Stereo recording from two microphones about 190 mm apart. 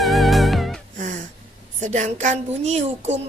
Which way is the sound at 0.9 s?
40° right (ahead or behind).